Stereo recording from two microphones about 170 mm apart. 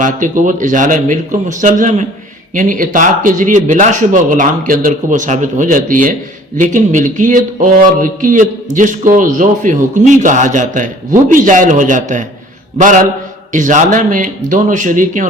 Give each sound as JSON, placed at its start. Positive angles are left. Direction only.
{"t": 0.0, "sound": "speech", "side_deg": -50}